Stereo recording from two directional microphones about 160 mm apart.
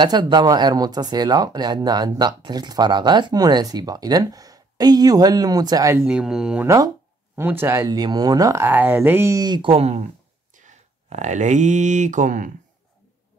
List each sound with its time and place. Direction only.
0.0 s speech: 25° right (ahead or behind)
6.0 s speech: 5° right (ahead or behind); by 12.4 s 50° right (ahead or behind)